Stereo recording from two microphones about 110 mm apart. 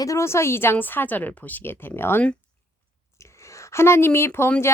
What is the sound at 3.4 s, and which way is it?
Speech, 25° left (ahead or behind).